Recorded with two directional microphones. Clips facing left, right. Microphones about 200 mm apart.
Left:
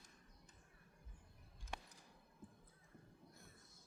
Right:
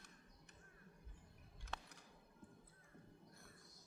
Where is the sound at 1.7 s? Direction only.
65° right (ahead or behind).